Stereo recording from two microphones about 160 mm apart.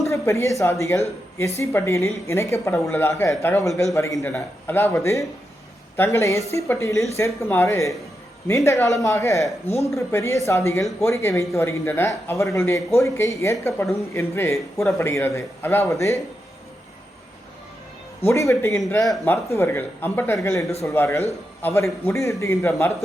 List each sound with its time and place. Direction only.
0.0 s a woman's voice: 20° left (ahead or behind)
18.3 s a woman's voice: 15° left (ahead or behind)